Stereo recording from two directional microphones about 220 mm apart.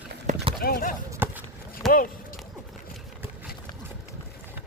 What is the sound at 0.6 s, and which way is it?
Clip-clop, 40° left (ahead or behind).